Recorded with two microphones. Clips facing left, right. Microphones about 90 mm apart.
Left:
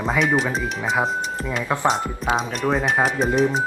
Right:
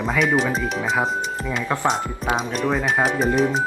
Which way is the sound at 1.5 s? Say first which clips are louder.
Left 1 dB; 5° left (ahead or behind).